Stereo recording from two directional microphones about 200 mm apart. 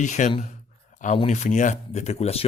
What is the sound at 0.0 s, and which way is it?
Speech, 35° left (ahead or behind).